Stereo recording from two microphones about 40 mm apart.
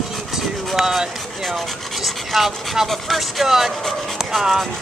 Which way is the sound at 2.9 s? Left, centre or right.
Centre.